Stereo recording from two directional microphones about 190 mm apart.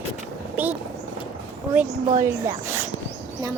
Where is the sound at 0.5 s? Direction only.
10° right (ahead or behind).